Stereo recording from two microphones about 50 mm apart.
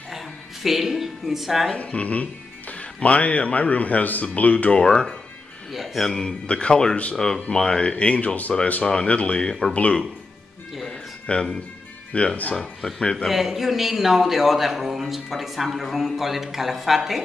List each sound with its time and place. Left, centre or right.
0.1 s a sound: centre
1.8 s a man's voice: left
5.7 s a man's voice: centre
6.0 s speech: centre
6.4 s a man's voice: left
9.8 s a man's voice: left
10.9 s a sound: centre
12.1 s a man's voice: left
13.3 s a man's voice: centre